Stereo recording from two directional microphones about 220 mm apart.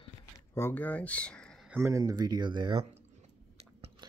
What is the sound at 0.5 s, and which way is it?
Speech, 10° left (ahead or behind).